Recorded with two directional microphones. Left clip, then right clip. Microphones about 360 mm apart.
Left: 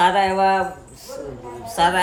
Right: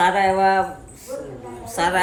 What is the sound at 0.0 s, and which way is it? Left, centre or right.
Speech, centre.